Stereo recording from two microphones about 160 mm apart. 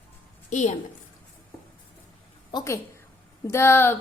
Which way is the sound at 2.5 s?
20° left (ahead or behind).